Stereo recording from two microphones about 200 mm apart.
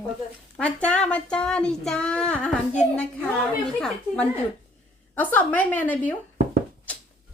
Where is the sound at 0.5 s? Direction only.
5° left (ahead or behind).